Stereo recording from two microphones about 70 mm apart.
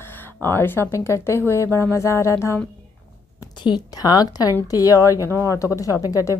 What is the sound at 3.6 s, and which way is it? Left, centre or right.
A woman's voice, left.